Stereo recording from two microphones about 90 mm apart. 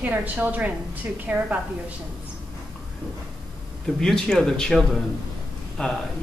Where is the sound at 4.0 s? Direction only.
5° left (ahead or behind).